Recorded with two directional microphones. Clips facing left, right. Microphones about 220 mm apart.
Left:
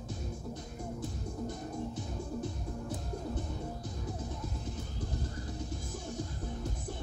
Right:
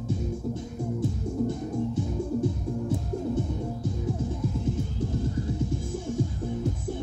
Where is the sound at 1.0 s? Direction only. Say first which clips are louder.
Right 12 dB; 25° right (ahead or behind).